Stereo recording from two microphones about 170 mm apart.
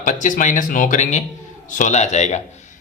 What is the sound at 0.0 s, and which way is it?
Speech, 50° left (ahead or behind).